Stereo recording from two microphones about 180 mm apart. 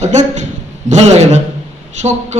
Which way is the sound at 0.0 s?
40° right (ahead or behind).